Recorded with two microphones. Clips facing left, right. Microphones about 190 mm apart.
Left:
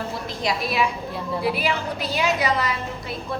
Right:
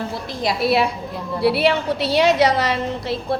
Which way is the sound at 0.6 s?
70° right (ahead or behind).